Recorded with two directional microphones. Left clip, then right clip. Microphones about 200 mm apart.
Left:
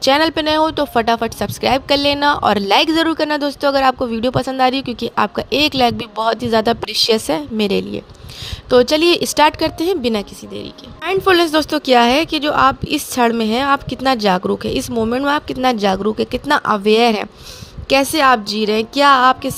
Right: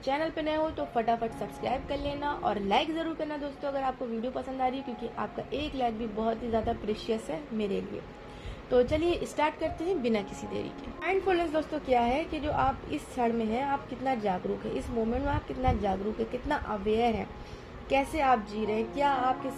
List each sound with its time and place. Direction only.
0.0 s speech: 45° left (ahead or behind)